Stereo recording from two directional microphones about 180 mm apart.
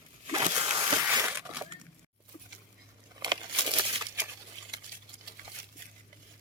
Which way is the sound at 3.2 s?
25° right (ahead or behind).